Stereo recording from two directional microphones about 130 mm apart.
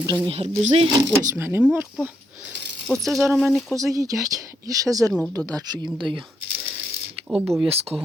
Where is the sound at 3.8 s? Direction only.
25° right (ahead or behind).